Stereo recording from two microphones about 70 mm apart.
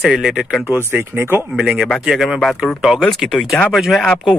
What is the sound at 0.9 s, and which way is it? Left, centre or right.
Speech, right.